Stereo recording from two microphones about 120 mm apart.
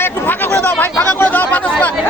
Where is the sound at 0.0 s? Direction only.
15° left (ahead or behind).